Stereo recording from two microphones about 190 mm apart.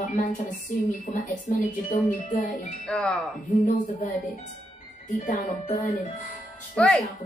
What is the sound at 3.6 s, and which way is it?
Speech, 45° left (ahead or behind).